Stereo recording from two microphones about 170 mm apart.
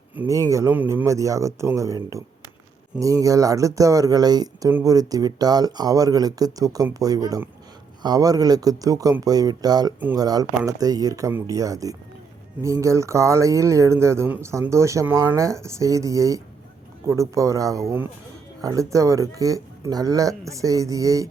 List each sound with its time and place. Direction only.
0.2 s speech: 20° right (ahead or behind)